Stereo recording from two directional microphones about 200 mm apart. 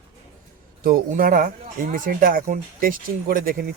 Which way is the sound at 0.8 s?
45° right (ahead or behind).